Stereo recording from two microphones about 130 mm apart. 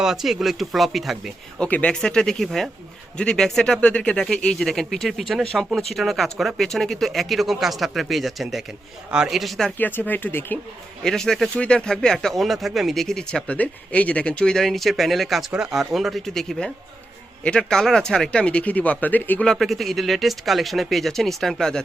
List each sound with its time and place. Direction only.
0.0 s speech: 5° right (ahead or behind)
1.6 s speech: 10° left (ahead or behind)
9.7 s speech: 15° left (ahead or behind)
11.0 s speech: 5° left (ahead or behind)